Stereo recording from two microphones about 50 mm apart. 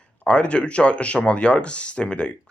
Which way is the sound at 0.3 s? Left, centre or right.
Left.